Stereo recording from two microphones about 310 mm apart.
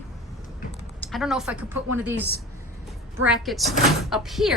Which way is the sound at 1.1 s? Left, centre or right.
Centre.